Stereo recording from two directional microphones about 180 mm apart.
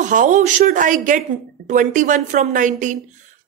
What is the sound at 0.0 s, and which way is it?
A woman's voice, 45° right (ahead or behind).